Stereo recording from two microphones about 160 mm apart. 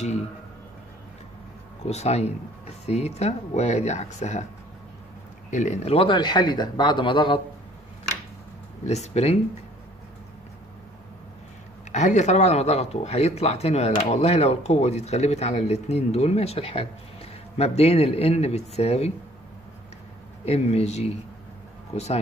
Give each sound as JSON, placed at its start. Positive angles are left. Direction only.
{"t": 1.9, "sound": "speech", "side_deg": 45}
{"t": 5.5, "sound": "speech", "side_deg": 45}
{"t": 8.8, "sound": "speech", "side_deg": 45}
{"t": 11.9, "sound": "speech", "side_deg": 45}
{"t": 20.4, "sound": "speech", "side_deg": 40}